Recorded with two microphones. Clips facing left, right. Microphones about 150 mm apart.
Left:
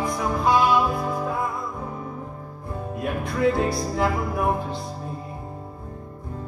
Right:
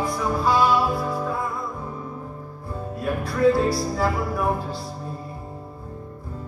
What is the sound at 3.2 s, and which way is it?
Music, 20° left (ahead or behind).